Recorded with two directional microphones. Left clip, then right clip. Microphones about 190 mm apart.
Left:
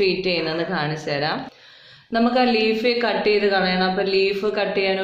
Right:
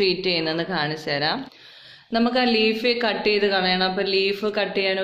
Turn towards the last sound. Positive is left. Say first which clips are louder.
# left 2 dB
turn(degrees=-45)  # may be behind; listen again after turning